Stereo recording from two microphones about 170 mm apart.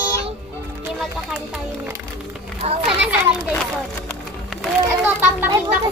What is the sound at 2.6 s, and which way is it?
Speech, 40° right (ahead or behind).